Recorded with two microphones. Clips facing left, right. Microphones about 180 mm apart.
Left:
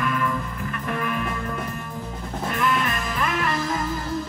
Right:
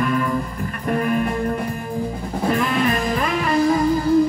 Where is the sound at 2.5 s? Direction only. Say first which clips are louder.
Right 5 dB; 35° right (ahead or behind).